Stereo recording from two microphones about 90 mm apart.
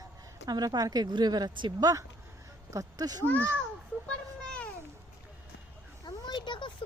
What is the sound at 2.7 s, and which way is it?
Speech, 40° right (ahead or behind).